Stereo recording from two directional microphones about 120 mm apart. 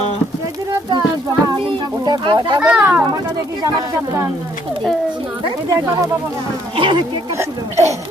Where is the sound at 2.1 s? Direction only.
35° right (ahead or behind).